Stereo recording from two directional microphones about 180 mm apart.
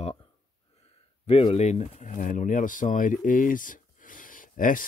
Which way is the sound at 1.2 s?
35° left (ahead or behind).